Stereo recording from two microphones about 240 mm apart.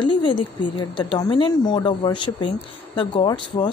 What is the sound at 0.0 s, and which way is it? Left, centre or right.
A woman's voice, centre.